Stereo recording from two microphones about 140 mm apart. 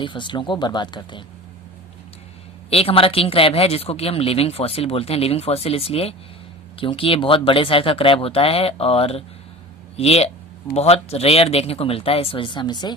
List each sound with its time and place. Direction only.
0.0 s speech: 35° left (ahead or behind)
2.6 s speech: 45° left (ahead or behind)